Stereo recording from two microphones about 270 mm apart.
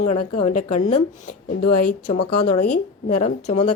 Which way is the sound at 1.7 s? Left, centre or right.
Left.